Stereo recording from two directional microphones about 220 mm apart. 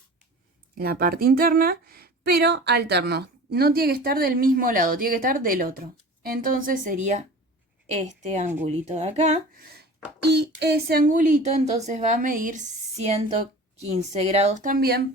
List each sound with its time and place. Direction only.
0.8 s speech: 45° right (ahead or behind)